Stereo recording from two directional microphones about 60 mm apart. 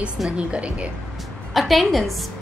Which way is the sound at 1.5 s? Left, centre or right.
Centre.